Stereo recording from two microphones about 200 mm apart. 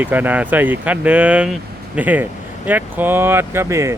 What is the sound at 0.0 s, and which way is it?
Speech, 10° right (ahead or behind).